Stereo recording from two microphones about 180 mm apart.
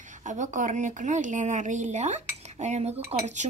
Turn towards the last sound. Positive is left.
turn(degrees=-40)  # may be behind; listen again after turning